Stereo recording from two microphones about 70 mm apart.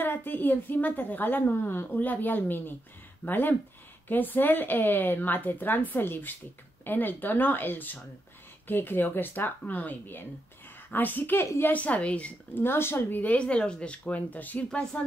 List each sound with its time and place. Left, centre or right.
0.0 s a woman's voice: left
11.7 s a woman's voice: left
12.6 s speech: left
13.2 s a woman's voice: centre
14.7 s speech: centre